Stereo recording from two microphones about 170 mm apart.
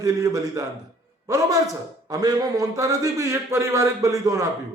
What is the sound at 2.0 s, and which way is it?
A man's voice, 20° right (ahead or behind).